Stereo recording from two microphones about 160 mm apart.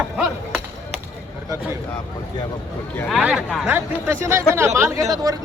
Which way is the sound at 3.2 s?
Centre (ahead or behind).